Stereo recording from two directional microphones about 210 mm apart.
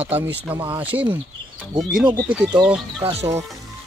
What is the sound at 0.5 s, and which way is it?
Speech, 10° right (ahead or behind).